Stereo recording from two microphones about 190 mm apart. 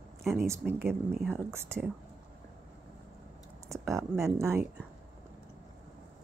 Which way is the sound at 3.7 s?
15° right (ahead or behind).